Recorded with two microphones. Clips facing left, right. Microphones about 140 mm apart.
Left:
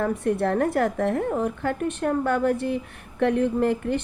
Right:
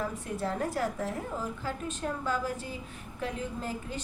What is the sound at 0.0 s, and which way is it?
A woman's voice, 65° left (ahead or behind).